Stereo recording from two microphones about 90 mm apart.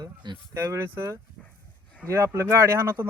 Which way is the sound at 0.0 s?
55° right (ahead or behind).